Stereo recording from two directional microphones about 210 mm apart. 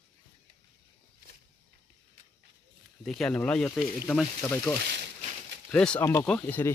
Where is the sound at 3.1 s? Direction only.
5° left (ahead or behind).